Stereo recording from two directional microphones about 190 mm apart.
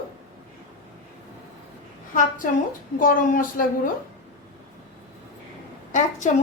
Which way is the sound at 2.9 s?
45° left (ahead or behind).